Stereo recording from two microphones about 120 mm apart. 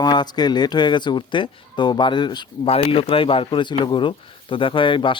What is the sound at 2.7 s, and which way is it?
A man's voice, 50° left (ahead or behind).